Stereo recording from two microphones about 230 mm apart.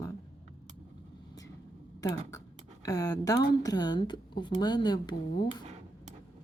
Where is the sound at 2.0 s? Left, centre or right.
Centre.